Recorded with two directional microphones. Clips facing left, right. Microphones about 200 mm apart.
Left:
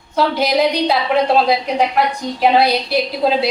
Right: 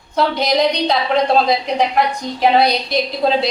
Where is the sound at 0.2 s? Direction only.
5° left (ahead or behind).